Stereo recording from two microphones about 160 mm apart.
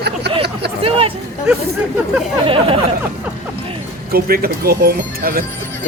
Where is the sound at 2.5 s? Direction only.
35° right (ahead or behind).